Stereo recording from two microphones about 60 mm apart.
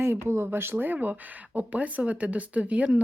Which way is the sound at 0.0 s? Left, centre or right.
Right.